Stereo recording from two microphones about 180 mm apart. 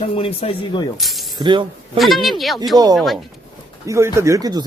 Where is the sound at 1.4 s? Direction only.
25° right (ahead or behind).